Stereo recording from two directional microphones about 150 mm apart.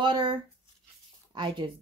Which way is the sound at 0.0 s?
30° right (ahead or behind).